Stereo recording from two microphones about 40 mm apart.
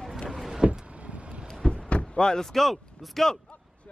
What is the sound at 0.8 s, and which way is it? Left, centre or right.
Vehicle, right.